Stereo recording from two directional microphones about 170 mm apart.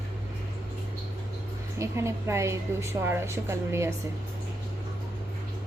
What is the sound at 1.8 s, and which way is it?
A woman's voice, 15° right (ahead or behind).